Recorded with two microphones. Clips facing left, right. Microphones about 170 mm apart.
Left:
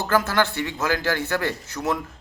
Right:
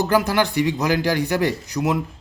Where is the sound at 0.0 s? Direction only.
15° right (ahead or behind).